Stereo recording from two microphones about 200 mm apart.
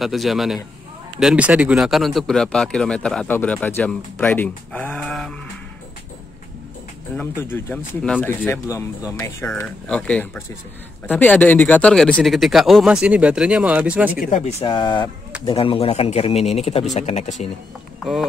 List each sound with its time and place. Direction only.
0.0 s speech: centre (ahead or behind)
7.5 s speech: 10° left (ahead or behind); by 14.2 s 5° right (ahead or behind)
14.2 s speech: 35° left (ahead or behind)